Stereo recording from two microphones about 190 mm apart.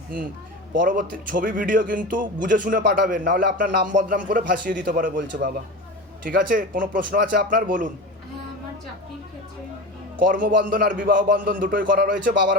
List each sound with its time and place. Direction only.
0.9 s a man's voice: 45° right (ahead or behind)
6.2 s a man's voice: 45° right (ahead or behind)
10.2 s a man's voice: 45° right (ahead or behind)